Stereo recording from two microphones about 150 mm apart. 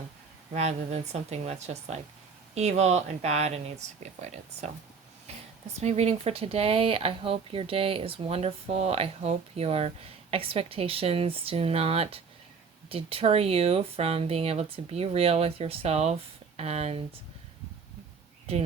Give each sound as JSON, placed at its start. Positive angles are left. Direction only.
{"t": 0.5, "sound": "speech", "side_deg": -45}
{"t": 5.3, "sound": "a sound", "side_deg": -45}
{"t": 5.8, "sound": "speech", "side_deg": -45}